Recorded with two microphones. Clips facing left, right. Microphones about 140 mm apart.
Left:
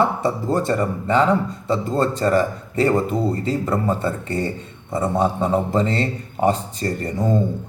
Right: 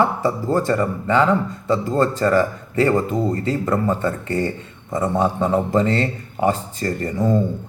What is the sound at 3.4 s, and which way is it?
A man's voice, 35° left (ahead or behind).